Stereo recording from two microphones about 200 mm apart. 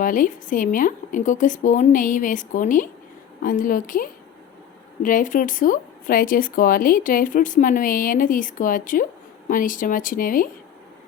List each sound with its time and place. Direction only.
0.0 s a woman's voice: 40° left (ahead or behind)